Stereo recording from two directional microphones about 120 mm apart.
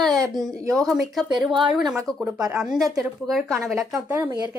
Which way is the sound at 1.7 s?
Centre (ahead or behind).